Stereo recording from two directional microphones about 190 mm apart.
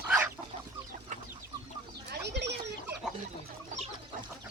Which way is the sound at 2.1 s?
65° right (ahead or behind).